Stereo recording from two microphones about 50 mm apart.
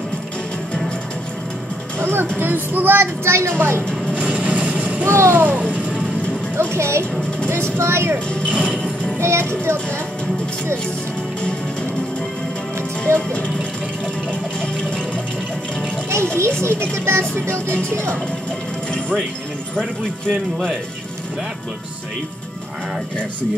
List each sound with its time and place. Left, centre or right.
2.0 s music: right
2.3 s speech: right
4.2 s vehicle: right
5.0 s speech: right
5.3 s music: right
6.6 s speech: right
8.5 s music: right
9.2 s speech: right
13.1 s speech: right
16.1 s a child's voice: right